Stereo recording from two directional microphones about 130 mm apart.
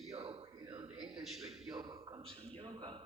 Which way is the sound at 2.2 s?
45° right (ahead or behind).